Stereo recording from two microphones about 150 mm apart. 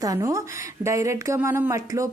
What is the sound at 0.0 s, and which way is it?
A woman's voice, 25° right (ahead or behind).